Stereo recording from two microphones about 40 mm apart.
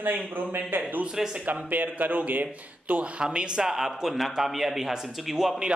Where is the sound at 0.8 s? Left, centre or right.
Right.